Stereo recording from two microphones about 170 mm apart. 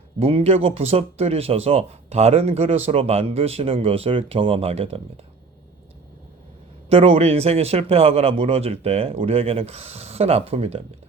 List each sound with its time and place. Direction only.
0.2 s speech: 35° right (ahead or behind)
6.9 s speech: 35° right (ahead or behind)